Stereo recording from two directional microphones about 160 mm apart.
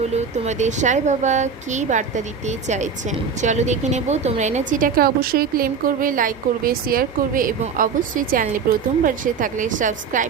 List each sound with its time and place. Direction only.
0.1 s a woman's voice: 45° right (ahead or behind)